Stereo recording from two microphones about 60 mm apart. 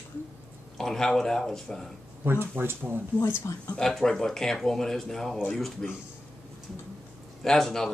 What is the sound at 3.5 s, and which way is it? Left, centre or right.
Speech, left.